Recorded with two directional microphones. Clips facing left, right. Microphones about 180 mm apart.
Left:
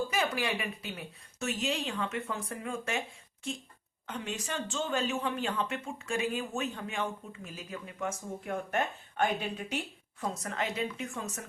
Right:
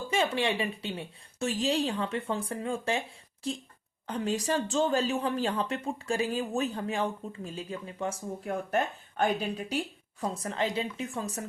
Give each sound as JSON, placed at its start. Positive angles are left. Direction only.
{"t": 0.1, "sound": "speech", "side_deg": -25}
{"t": 4.0, "sound": "speech", "side_deg": -35}